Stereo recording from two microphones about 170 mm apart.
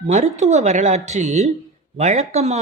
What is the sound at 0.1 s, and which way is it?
A man's voice, 40° right (ahead or behind).